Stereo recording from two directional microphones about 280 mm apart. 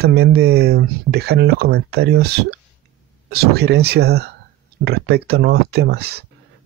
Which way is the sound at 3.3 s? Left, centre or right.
Right.